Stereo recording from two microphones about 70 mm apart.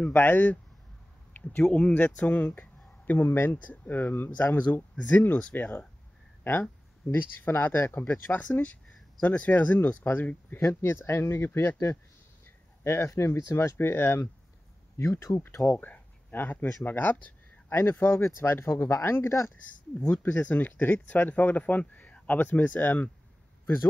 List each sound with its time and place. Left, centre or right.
0.0 s speech: left
1.3 s a sound: left
1.6 s speech: centre
2.0 s speech: left
6.4 s speech: left
10.6 s speech: left
15.0 s speech: left
15.8 s a sound: left
17.7 s speech: left
19.9 s speech: left